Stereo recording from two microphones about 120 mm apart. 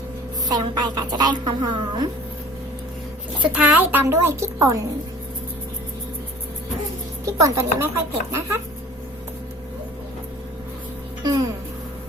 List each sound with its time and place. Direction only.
0.4 s a woman's voice: 35° right (ahead or behind)
3.4 s a child's voice: 10° right (ahead or behind)
7.3 s a woman's voice: 25° right (ahead or behind)
11.2 s music: 35° right (ahead or behind)